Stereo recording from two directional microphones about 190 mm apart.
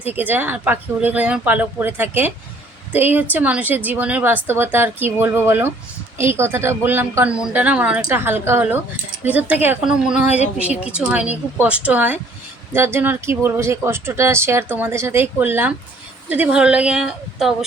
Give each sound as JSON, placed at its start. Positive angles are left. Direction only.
{"t": 0.0, "sound": "a woman's voice", "side_deg": -10}